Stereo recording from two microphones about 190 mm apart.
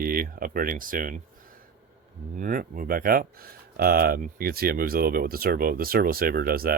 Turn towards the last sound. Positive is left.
turn(degrees=-50)  # may be behind; listen again after turning